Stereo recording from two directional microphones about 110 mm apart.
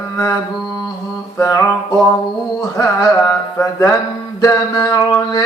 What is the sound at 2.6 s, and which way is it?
Speech, 25° left (ahead or behind).